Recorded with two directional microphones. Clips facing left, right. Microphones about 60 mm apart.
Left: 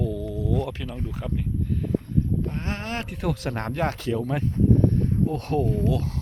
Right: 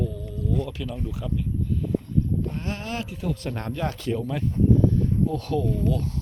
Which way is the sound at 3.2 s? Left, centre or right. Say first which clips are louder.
Left 5 dB; left.